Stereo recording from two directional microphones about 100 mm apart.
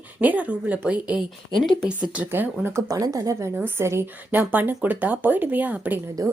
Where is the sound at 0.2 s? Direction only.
15° right (ahead or behind).